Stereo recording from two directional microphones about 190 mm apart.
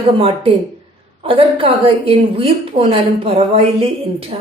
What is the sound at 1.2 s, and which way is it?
A woman's voice, 30° right (ahead or behind).